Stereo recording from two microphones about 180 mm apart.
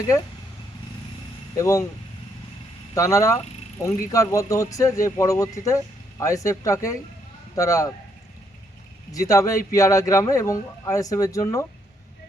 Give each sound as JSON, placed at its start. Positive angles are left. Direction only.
{"t": 1.5, "sound": "speech", "side_deg": 15}
{"t": 2.9, "sound": "speech", "side_deg": 15}
{"t": 9.1, "sound": "speech", "side_deg": 20}